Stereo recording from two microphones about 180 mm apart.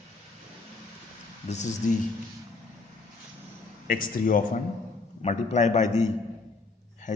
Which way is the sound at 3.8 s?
50° left (ahead or behind).